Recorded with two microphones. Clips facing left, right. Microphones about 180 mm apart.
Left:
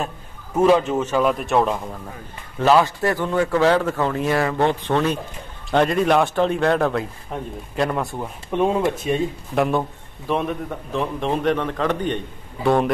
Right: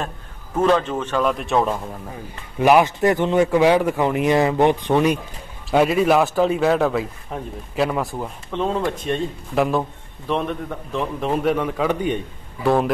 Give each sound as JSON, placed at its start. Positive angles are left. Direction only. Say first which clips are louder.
{"t": 0.6, "sound": "a man's voice", "louder": "left 2 dB", "side_deg": 10}
{"t": 2.6, "sound": "a man's voice", "louder": "right 2 dB", "side_deg": -15}
{"t": 8.5, "sound": "a man's voice", "louder": "left 4 dB", "side_deg": 15}
{"t": 9.0, "sound": "a man's voice", "louder": "left 2 dB", "side_deg": 0}